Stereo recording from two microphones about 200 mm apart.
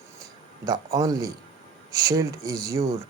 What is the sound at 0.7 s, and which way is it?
Speech, 15° right (ahead or behind).